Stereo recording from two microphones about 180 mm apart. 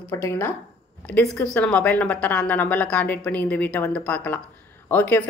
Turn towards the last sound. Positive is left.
turn(degrees=10)  # may be behind; listen again after turning